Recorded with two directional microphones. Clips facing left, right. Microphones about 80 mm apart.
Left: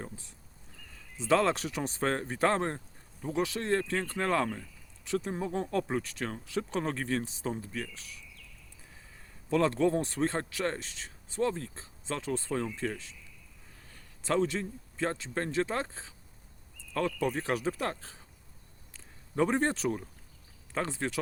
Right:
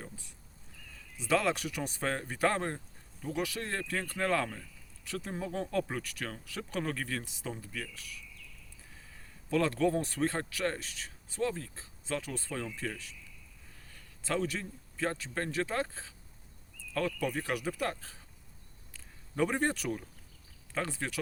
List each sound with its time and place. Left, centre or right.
0.0 s horse: left
1.1 s speech: left
9.5 s a man's voice: left